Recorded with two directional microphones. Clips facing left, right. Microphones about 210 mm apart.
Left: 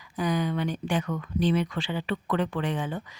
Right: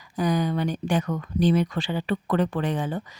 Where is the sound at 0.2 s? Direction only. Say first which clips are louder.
Right 3 dB; 40° right (ahead or behind).